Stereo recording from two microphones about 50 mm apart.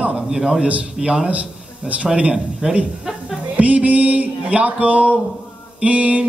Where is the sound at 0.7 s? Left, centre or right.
Right.